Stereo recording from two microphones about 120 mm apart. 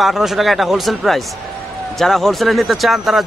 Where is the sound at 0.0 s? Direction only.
Centre (ahead or behind).